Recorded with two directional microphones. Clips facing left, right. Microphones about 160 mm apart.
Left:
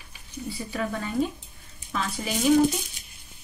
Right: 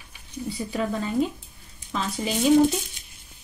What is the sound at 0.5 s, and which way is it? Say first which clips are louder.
Speech: right 3 dB; 20° right (ahead or behind).